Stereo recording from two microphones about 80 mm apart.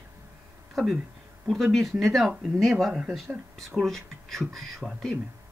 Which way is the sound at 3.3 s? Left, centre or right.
Centre.